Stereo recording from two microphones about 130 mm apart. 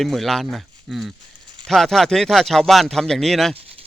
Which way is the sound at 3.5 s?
50° right (ahead or behind).